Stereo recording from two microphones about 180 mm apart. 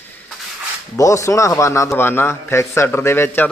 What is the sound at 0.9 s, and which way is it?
A man's voice, 15° left (ahead or behind).